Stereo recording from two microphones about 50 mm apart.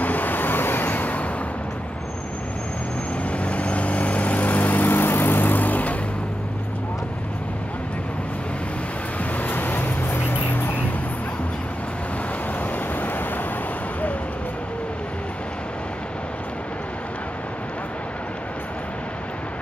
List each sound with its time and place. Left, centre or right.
0.0 s vehicle: left
3.3 s vehicle: left
9.2 s vehicle: left
12.7 s vehicle: left